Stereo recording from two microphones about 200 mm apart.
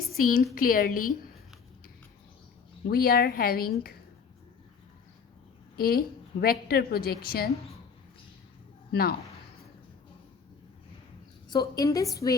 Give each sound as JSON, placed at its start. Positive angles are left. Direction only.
{"t": 0.1, "sound": "a woman's voice", "side_deg": 45}
{"t": 2.9, "sound": "a woman's voice", "side_deg": 50}
{"t": 5.7, "sound": "a woman's voice", "side_deg": 50}
{"t": 8.9, "sound": "speech", "side_deg": 50}
{"t": 11.4, "sound": "a woman's voice", "side_deg": 20}